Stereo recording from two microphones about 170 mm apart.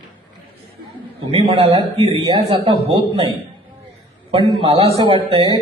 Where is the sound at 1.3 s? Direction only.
30° right (ahead or behind).